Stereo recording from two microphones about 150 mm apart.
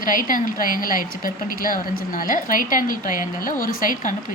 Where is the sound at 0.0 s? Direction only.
65° left (ahead or behind).